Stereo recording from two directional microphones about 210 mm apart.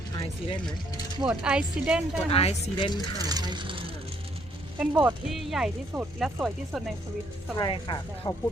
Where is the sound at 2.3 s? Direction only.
25° left (ahead or behind).